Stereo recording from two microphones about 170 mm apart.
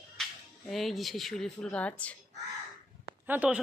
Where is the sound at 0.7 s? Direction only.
Centre (ahead or behind).